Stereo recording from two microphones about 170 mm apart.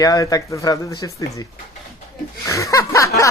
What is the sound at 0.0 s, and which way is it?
Speech, 20° left (ahead or behind).